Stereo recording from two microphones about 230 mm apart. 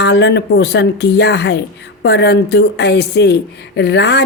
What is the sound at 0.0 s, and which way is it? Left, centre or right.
A woman's voice, left.